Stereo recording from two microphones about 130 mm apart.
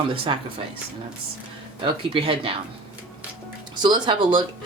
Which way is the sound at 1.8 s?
40° right (ahead or behind).